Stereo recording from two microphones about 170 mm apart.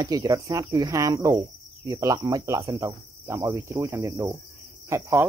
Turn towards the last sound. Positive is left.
turn(degrees=-15)  # may be behind; listen again after turning